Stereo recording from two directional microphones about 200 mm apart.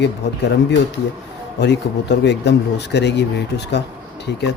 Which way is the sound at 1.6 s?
60° left (ahead or behind).